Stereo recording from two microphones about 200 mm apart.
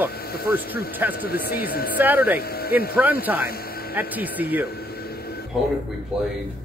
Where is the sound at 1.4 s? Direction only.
50° left (ahead or behind).